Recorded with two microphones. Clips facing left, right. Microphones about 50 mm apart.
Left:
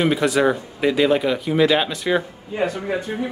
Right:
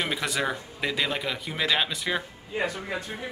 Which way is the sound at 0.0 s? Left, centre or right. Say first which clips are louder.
Left 10 dB; centre.